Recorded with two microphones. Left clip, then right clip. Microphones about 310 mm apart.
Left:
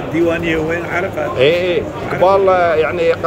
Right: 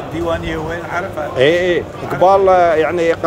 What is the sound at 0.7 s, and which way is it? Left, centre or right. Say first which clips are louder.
A man's voice: left 3 dB; centre.